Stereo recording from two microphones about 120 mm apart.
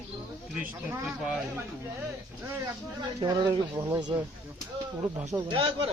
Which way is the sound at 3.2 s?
40° right (ahead or behind).